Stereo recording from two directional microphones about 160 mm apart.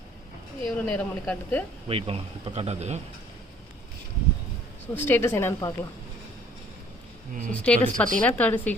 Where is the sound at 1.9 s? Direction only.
40° right (ahead or behind).